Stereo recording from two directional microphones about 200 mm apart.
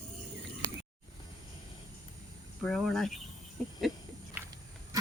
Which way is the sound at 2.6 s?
Centre (ahead or behind).